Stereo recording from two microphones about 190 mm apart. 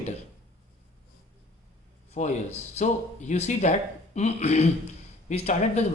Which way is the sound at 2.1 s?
35° left (ahead or behind).